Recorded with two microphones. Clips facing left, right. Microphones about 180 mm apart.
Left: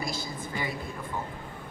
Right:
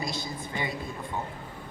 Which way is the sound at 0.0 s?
20° right (ahead or behind).